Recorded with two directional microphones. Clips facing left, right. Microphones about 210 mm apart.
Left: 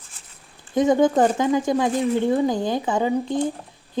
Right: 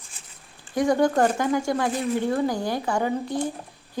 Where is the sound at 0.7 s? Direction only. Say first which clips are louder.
Left 3 dB; 20° left (ahead or behind).